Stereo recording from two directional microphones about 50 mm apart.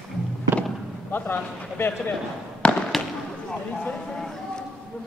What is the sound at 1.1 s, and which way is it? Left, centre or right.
A man's voice, left.